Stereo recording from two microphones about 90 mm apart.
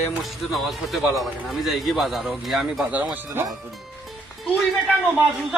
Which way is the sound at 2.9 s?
15° right (ahead or behind).